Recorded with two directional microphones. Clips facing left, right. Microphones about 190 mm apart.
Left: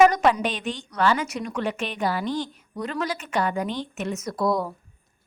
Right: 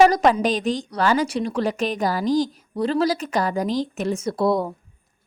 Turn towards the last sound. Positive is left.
turn(degrees=-25)  # may be behind; listen again after turning